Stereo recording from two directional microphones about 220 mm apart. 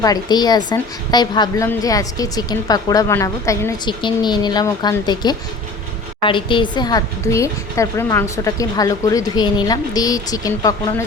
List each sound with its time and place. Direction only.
0.0 s a woman's voice: 20° left (ahead or behind)